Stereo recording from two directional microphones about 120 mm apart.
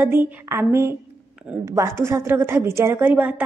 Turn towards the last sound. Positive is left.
turn(degrees=-15)  # may be behind; listen again after turning